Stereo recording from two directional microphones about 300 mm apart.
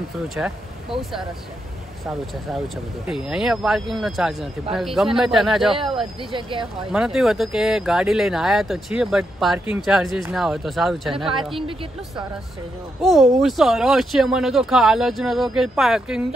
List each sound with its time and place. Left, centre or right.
0.3 s speech: centre
2.0 s speech: centre
6.3 s a woman's voice: centre
6.9 s speech: centre
11.5 s a woman's voice: centre
13.0 s speech: centre